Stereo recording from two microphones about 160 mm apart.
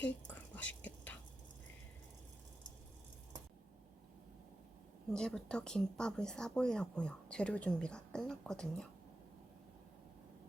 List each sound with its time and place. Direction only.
0.0 s whispering: 10° left (ahead or behind)
5.1 s speech: 5° left (ahead or behind)